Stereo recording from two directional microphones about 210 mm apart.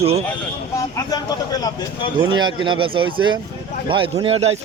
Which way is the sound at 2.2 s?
20° right (ahead or behind).